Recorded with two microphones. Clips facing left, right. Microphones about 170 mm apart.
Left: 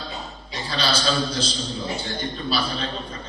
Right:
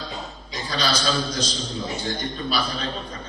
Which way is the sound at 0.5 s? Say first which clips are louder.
Even; 30° left (ahead or behind).